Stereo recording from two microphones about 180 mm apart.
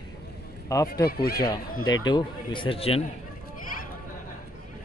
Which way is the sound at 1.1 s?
60° left (ahead or behind).